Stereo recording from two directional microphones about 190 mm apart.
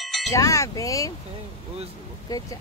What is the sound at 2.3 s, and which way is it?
Speech, 20° left (ahead or behind).